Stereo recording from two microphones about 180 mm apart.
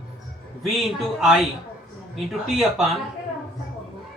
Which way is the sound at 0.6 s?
Centre (ahead or behind).